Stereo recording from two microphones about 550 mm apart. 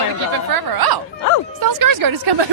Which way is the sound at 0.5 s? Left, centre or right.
Right.